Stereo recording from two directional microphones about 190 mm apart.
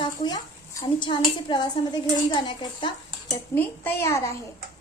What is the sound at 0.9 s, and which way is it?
Speech, 25° left (ahead or behind).